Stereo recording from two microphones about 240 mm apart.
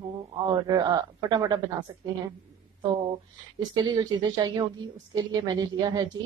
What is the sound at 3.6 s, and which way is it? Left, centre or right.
A woman's voice, centre.